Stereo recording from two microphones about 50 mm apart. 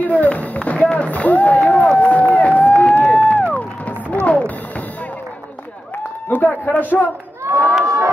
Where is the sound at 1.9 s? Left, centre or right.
Left.